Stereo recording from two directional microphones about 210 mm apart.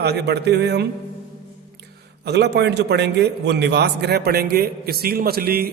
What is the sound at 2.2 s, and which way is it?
A man's voice, 50° right (ahead or behind).